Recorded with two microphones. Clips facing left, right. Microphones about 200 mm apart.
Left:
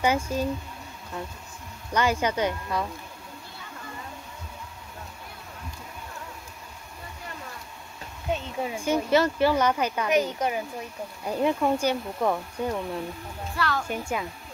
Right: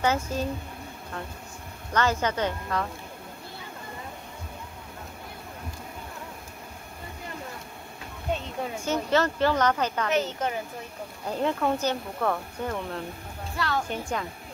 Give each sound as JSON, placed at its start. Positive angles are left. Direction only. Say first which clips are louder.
{"t": 0.0, "sound": "speech", "louder": "left 1 dB", "side_deg": 10}
{"t": 1.9, "sound": "speech", "louder": "left 1 dB", "side_deg": 10}
{"t": 8.3, "sound": "speech", "louder": "left 1 dB", "side_deg": 10}
{"t": 13.6, "sound": "speech", "louder": "even", "side_deg": -20}
{"t": 13.8, "sound": "speech", "louder": "left 1 dB", "side_deg": 10}